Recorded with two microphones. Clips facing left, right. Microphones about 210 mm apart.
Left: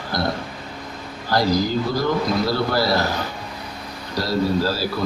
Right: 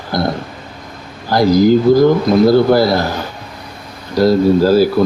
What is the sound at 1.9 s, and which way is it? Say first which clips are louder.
Speech: right 14 dB; 50° right (ahead or behind).